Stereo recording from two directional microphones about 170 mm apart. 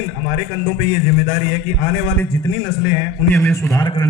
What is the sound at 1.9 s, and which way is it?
Speech, 10° left (ahead or behind).